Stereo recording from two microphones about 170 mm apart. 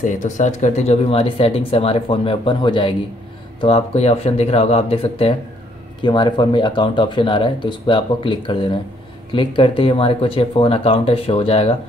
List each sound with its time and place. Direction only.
0.0 s speech: 45° left (ahead or behind)